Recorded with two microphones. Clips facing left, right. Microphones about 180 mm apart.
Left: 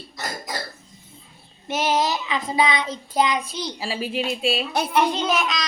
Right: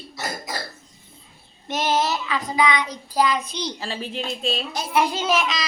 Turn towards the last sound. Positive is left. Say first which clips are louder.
# right 1 dB
turn(degrees=0)  # may be behind; listen again after turning